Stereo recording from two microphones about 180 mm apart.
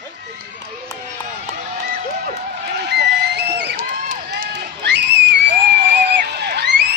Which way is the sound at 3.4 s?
70° right (ahead or behind).